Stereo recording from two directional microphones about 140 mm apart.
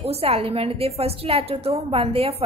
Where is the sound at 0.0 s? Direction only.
45° right (ahead or behind).